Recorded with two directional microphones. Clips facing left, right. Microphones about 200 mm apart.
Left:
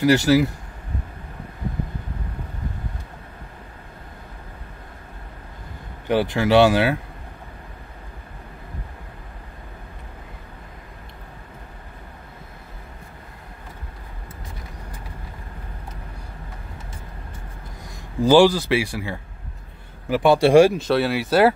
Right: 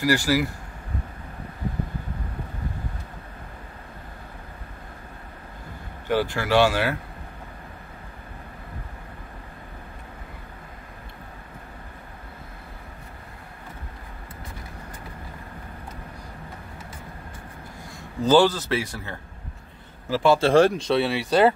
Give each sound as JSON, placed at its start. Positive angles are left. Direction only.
{"t": 0.0, "sound": "speech", "side_deg": 20}
{"t": 6.0, "sound": "speech", "side_deg": 20}
{"t": 17.8, "sound": "speech", "side_deg": 15}